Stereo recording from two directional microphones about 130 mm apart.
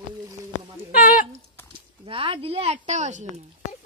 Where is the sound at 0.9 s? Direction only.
90° left.